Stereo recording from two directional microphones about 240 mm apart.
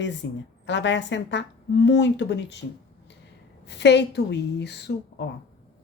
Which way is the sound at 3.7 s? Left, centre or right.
Left.